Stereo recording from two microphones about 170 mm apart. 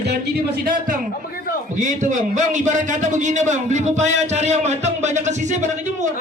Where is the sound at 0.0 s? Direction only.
70° right (ahead or behind); by 6.1 s 45° right (ahead or behind).